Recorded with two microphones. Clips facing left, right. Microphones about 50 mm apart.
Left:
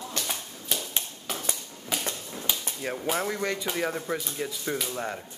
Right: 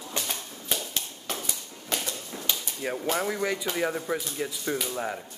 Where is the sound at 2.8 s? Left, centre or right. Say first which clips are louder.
Right 1 dB; centre.